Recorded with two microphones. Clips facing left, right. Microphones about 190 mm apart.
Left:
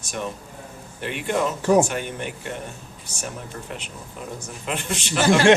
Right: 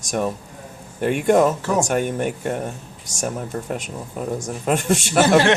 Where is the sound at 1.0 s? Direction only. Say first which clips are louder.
Right 8 dB; 45° right (ahead or behind).